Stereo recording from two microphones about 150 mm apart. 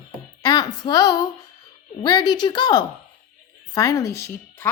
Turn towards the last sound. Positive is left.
turn(degrees=20)  # may be behind; listen again after turning